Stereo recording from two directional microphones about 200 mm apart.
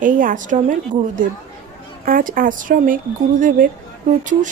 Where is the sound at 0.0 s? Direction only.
40° right (ahead or behind).